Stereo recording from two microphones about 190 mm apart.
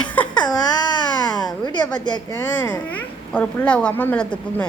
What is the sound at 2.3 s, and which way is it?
A woman's voice, 10° left (ahead or behind).